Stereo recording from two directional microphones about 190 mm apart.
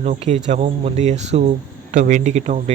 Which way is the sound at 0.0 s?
40° right (ahead or behind).